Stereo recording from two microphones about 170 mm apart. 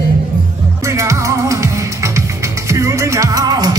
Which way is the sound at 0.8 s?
15° right (ahead or behind).